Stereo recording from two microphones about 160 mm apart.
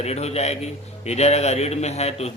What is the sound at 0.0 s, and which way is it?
A man's voice, 40° left (ahead or behind).